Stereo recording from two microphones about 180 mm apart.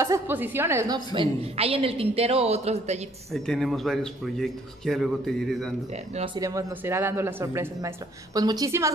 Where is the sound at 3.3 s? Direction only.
Centre (ahead or behind).